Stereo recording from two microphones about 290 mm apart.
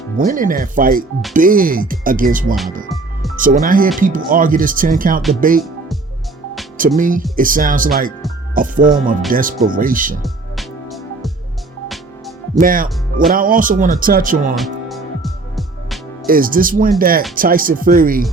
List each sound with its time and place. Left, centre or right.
0.2 s speech: right
6.7 s speech: right
10.2 s music: centre
12.5 s speech: right
14.5 s music: centre
16.2 s speech: right